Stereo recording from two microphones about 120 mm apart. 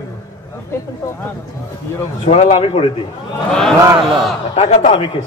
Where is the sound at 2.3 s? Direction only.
65° left (ahead or behind).